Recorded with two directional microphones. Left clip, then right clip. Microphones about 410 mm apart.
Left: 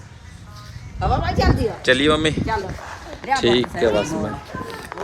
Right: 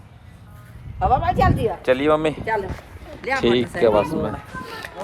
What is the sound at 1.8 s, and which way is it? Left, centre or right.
Speech, centre.